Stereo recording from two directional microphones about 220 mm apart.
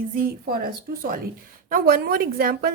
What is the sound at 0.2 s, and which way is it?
A woman's voice, 40° right (ahead or behind).